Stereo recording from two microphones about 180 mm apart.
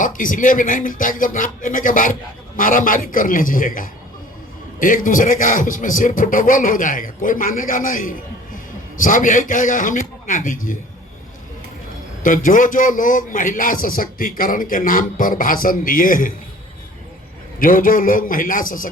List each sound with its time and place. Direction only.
0.0 s a man's voice: 50° left (ahead or behind)
12.2 s a man's voice: 50° left (ahead or behind)
17.6 s a man's voice: 50° left (ahead or behind)